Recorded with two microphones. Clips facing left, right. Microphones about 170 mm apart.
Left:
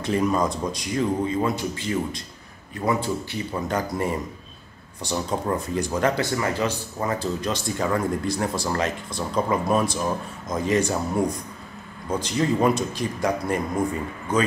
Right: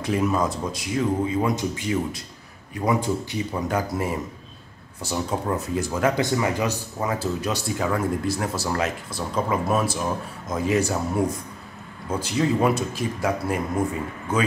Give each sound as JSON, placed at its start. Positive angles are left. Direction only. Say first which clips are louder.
{"t": 0.0, "sound": "speech", "louder": "left 1 dB", "side_deg": -5}
{"t": 6.1, "sound": "speech", "louder": "right 2 dB", "side_deg": -15}